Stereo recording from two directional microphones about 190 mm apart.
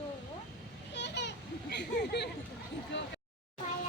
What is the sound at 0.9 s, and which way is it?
Children playing, 65° left (ahead or behind).